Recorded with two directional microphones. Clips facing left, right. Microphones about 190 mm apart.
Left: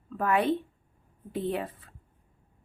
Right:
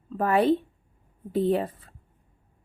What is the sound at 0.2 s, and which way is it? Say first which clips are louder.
A woman's voice: right 4 dB; 35° right (ahead or behind).